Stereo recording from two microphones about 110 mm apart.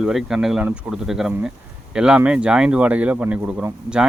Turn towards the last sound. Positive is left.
turn(degrees=-10)  # may be behind; listen again after turning